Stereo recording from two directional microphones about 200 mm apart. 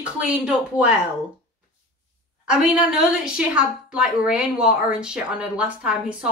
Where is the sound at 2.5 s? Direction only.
5° right (ahead or behind).